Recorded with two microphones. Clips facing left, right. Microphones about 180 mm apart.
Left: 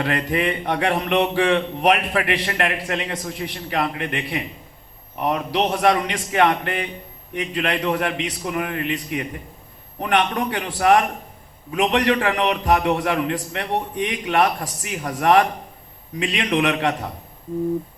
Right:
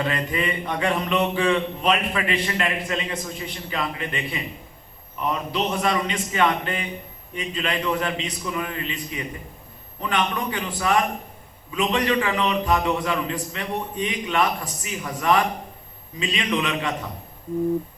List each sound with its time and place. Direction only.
0.0 s a man's voice: 65° left (ahead or behind)